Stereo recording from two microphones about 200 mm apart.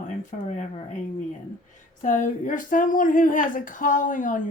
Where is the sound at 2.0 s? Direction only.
40° left (ahead or behind).